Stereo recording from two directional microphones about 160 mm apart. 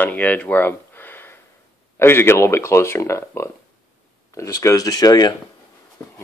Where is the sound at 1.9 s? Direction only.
15° left (ahead or behind).